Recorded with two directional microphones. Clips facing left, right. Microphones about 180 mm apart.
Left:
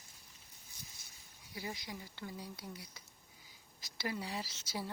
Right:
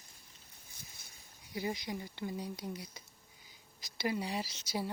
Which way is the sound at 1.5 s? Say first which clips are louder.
Right 7 dB; 20° right (ahead or behind).